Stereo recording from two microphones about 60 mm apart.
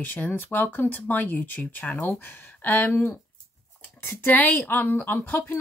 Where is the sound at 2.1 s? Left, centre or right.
Left.